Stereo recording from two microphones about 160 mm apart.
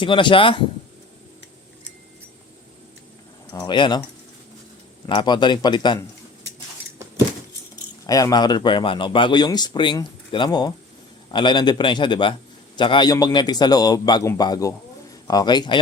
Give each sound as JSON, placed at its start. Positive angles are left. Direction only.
{"t": 0.0, "sound": "speech", "side_deg": 30}
{"t": 3.5, "sound": "speech", "side_deg": 25}
{"t": 5.0, "sound": "speech", "side_deg": 30}
{"t": 8.0, "sound": "speech", "side_deg": 25}